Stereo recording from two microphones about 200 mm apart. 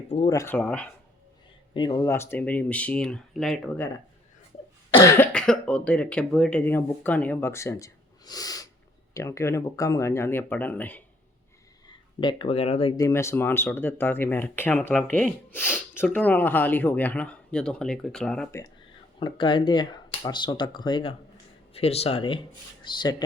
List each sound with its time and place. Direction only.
0.3 s speech: 15° left (ahead or behind)
1.7 s speech: 20° left (ahead or behind); by 3.8 s centre (ahead or behind)
4.9 s speech: 15° left (ahead or behind)
11.9 s speech: 25° left (ahead or behind)
13.0 s speech: 15° left (ahead or behind)
19.2 s speech: 25° left (ahead or behind)